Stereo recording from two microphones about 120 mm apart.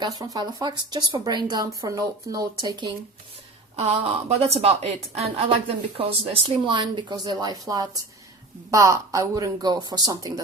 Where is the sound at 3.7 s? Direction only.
65° right (ahead or behind).